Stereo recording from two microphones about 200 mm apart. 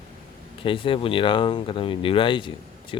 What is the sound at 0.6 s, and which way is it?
Speech, 25° left (ahead or behind).